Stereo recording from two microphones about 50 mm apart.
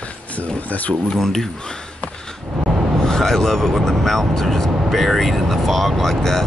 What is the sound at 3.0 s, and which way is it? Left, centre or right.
Speech, centre.